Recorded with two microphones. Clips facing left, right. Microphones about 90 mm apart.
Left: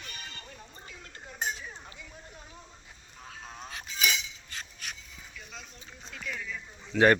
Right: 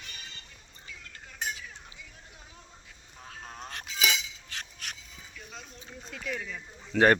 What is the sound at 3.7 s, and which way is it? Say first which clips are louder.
Cutlery: right 1 dB; 80° right.